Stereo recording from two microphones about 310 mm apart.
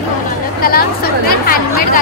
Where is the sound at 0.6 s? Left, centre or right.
Left.